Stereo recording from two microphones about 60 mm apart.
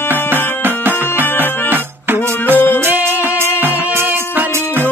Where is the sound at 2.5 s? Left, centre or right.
Left.